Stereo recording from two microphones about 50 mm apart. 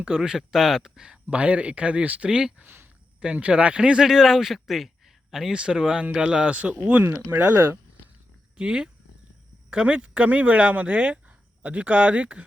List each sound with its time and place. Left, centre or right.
0.2 s speech: centre
2.6 s a sound: right
3.4 s speech: right; by 5.5 s centre
5.5 s speech: centre
7.3 s speech: right
8.5 s speech: right